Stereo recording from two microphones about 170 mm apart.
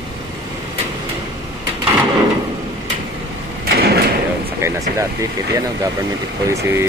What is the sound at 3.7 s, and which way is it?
Sliding door, 65° right (ahead or behind).